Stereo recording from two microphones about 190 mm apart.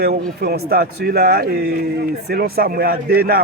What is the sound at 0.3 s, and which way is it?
Speech, 55° right (ahead or behind).